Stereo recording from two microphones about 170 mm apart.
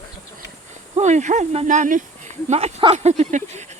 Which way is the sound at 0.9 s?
45° right (ahead or behind).